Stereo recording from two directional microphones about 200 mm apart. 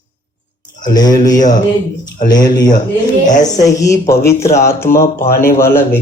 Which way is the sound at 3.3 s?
40° left (ahead or behind).